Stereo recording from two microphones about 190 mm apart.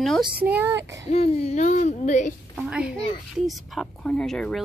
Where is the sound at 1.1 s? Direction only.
35° left (ahead or behind).